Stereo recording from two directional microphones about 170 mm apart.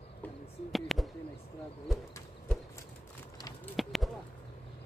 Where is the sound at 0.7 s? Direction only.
Centre (ahead or behind).